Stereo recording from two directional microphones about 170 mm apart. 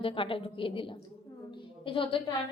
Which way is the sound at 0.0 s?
30° left (ahead or behind).